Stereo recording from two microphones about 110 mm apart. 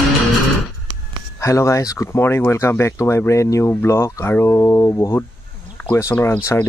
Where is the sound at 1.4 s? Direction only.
30° left (ahead or behind).